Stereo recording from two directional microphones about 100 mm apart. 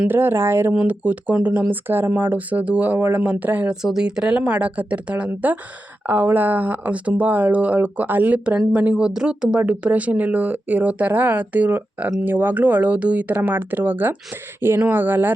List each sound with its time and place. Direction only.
0.1 s speech: 20° right (ahead or behind)